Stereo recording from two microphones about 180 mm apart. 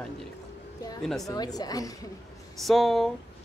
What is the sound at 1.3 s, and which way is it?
Speech, 20° left (ahead or behind).